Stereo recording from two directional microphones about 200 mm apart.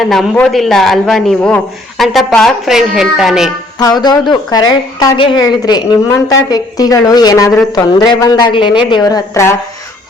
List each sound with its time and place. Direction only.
0.0 s a man's voice: centre (ahead or behind)
3.8 s a woman's voice: 20° left (ahead or behind)